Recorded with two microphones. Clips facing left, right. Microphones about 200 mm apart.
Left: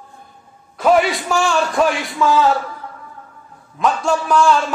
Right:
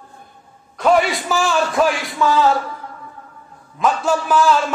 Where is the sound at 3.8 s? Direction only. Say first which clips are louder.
Even; centre (ahead or behind).